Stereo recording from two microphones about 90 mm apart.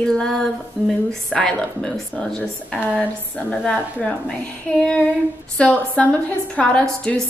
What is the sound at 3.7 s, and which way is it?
A woman's voice, 10° left (ahead or behind).